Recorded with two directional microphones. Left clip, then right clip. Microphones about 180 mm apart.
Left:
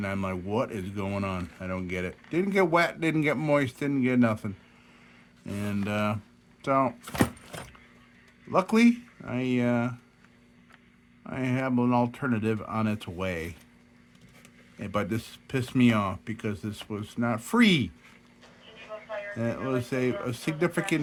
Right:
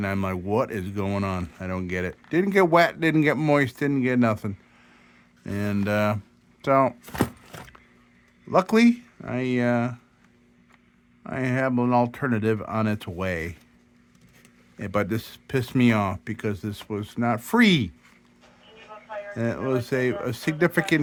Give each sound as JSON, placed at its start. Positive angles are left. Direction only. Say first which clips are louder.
{"t": 0.0, "sound": "speech", "louder": "right 4 dB", "side_deg": -45}
{"t": 8.4, "sound": "speech", "louder": "right 4 dB", "side_deg": -40}
{"t": 11.2, "sound": "speech", "louder": "right 5 dB", "side_deg": -40}
{"t": 14.8, "sound": "speech", "louder": "right 4 dB", "side_deg": -40}
{"t": 19.3, "sound": "speech", "louder": "right 5 dB", "side_deg": -40}